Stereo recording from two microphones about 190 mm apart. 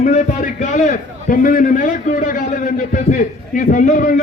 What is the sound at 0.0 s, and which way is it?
A man's voice, 45° left (ahead or behind).